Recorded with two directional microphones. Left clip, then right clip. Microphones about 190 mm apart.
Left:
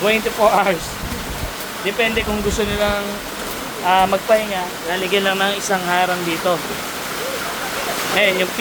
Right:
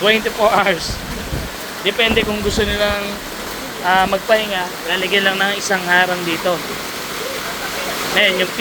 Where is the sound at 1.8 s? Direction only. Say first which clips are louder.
Right 3 dB; centre (ahead or behind).